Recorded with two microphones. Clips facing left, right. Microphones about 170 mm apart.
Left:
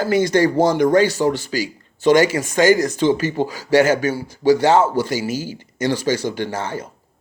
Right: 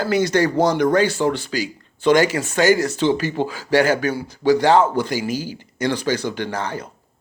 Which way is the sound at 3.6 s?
45° left (ahead or behind).